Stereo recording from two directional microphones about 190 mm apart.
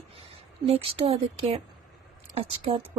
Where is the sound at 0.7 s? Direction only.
30° right (ahead or behind).